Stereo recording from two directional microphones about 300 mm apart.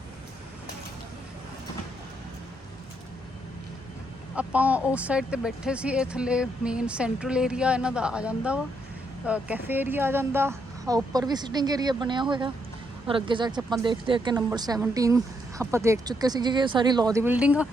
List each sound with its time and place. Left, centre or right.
4.4 s speech: centre